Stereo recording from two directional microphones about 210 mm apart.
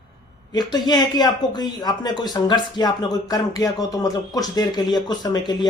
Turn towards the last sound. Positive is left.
turn(degrees=20)  # may be behind; listen again after turning